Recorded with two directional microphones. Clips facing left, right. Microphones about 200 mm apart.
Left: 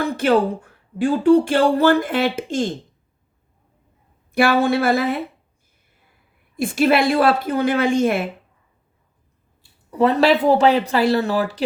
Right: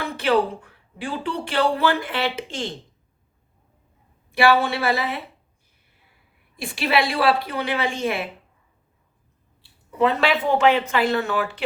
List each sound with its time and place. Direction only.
0.0 s speech: 45° left (ahead or behind)
4.3 s speech: 45° left (ahead or behind)
6.6 s speech: 45° left (ahead or behind)
10.0 s speech: 40° left (ahead or behind)